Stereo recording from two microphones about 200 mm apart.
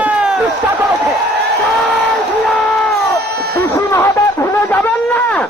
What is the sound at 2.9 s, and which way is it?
Baby cry, 55° right (ahead or behind).